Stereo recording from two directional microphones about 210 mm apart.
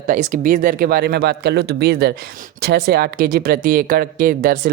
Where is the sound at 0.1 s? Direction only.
40° right (ahead or behind).